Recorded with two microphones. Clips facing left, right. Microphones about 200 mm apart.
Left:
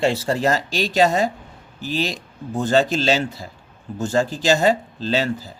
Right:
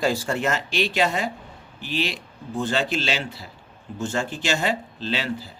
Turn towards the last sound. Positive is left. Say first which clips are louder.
# left 6 dB
turn(degrees=40)  # may be behind; listen again after turning